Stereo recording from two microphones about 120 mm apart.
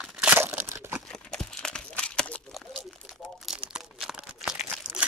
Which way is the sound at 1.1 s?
5° left (ahead or behind).